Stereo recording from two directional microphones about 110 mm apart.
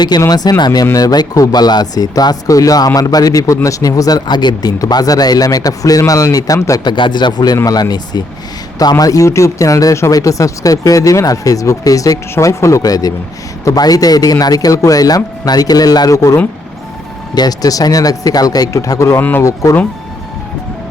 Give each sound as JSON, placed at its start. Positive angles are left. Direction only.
{"t": 0.0, "sound": "speech", "side_deg": 40}
{"t": 6.9, "sound": "speech", "side_deg": 45}